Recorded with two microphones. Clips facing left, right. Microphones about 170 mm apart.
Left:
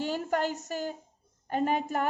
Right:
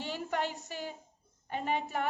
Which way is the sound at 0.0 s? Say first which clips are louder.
Left 5 dB; 45° left (ahead or behind).